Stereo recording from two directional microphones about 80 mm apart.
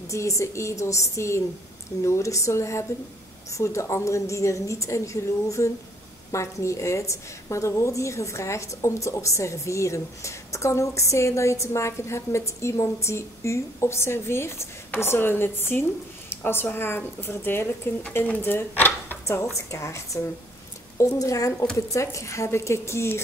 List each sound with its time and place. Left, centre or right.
0.1 s a woman's voice: left
19.2 s a woman's voice: left